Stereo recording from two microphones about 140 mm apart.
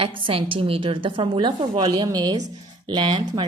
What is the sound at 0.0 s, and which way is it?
A woman's voice, 40° right (ahead or behind).